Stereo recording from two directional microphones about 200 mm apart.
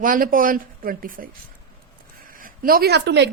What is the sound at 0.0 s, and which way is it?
Speech, 45° right (ahead or behind).